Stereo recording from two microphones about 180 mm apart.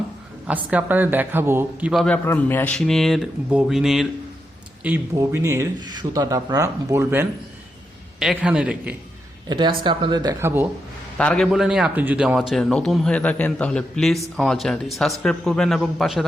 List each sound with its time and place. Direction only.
0.4 s speech: 10° right (ahead or behind)
1.9 s a man's voice: 5° left (ahead or behind)
5.1 s speech: 15° right (ahead or behind)
9.5 s speech: 25° right (ahead or behind)
11.2 s a man's voice: 5° left (ahead or behind)